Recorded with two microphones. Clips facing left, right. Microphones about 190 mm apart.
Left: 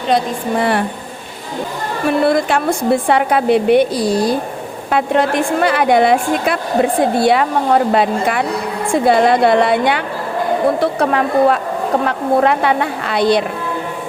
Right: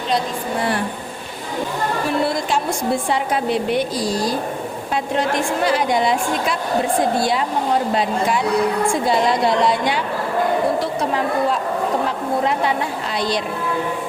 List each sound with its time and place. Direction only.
2.0 s a woman's voice: 60° left (ahead or behind)